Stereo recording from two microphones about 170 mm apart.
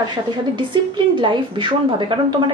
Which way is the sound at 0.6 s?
30° right (ahead or behind).